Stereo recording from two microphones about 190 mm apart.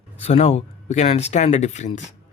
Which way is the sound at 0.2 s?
35° left (ahead or behind).